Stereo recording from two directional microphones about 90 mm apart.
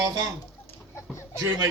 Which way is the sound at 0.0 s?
45° right (ahead or behind).